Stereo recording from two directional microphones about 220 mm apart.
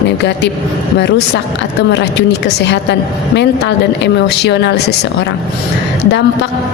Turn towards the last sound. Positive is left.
turn(degrees=50)  # may be behind; listen again after turning